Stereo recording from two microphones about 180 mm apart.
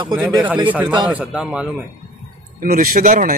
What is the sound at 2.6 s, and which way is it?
Speech, 50° right (ahead or behind).